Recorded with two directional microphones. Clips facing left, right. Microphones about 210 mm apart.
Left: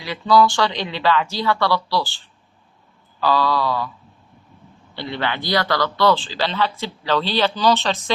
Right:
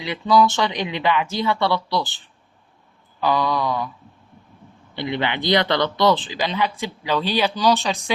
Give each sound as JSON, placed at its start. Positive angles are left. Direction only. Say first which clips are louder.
{"t": 0.0, "sound": "speech", "louder": "left 1 dB", "side_deg": -20}
{"t": 4.9, "sound": "speech", "louder": "right 2 dB", "side_deg": -20}